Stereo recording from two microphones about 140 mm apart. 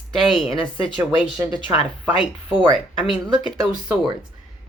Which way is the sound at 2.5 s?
35° right (ahead or behind).